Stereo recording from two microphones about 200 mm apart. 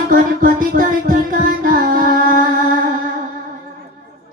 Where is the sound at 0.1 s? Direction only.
45° right (ahead or behind).